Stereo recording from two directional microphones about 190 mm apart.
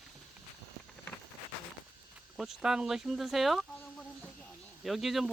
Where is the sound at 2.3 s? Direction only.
Centre (ahead or behind).